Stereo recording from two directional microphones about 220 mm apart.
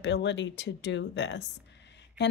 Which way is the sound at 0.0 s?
55° left (ahead or behind).